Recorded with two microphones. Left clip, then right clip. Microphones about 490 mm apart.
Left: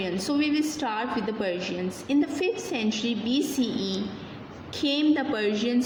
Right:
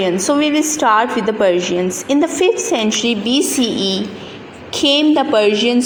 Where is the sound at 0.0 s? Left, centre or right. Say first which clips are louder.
Right 12 dB; left.